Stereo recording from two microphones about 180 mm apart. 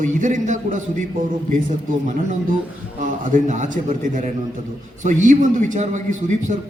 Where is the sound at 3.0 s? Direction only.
45° right (ahead or behind).